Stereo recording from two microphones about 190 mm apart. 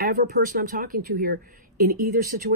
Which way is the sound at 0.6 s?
45° right (ahead or behind).